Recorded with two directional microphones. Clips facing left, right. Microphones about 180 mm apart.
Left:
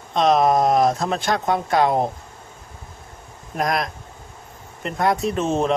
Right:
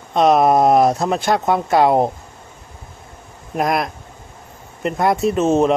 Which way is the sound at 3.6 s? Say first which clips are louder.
Right 4 dB; 5° right (ahead or behind).